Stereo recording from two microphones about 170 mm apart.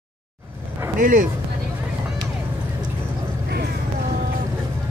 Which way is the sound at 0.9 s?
55° right (ahead or behind).